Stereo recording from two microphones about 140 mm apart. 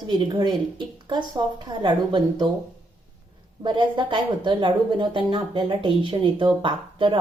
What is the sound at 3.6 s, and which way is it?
Speech, 35° right (ahead or behind).